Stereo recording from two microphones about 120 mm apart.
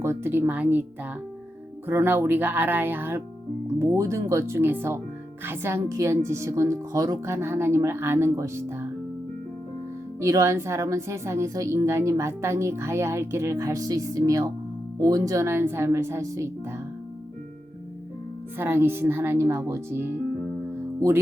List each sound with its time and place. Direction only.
0.0 s speech: 20° right (ahead or behind)
1.9 s speech: 20° right (ahead or behind)
10.2 s speech: 25° right (ahead or behind)
18.5 s speech: 20° right (ahead or behind)